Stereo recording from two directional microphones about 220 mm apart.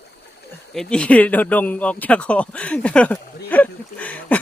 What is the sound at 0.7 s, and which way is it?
Speech, 5° left (ahead or behind).